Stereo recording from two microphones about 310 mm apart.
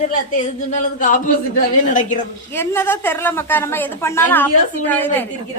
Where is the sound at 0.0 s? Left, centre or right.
Left.